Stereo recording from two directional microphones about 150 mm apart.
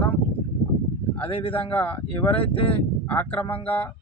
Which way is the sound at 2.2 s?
35° left (ahead or behind).